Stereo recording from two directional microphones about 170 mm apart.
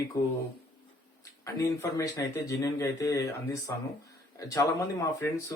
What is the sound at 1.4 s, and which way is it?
Speech, 20° left (ahead or behind).